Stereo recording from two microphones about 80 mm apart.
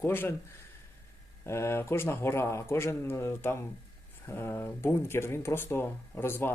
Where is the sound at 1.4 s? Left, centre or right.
Left.